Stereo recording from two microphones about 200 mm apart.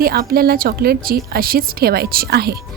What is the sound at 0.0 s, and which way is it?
A woman's voice, 50° right (ahead or behind).